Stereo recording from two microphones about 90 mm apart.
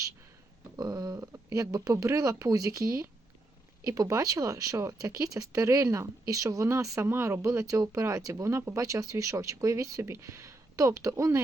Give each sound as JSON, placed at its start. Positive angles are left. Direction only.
{"t": 0.8, "sound": "speech", "side_deg": -45}